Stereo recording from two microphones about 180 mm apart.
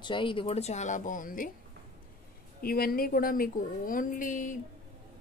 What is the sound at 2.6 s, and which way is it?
A woman's voice, 55° left (ahead or behind).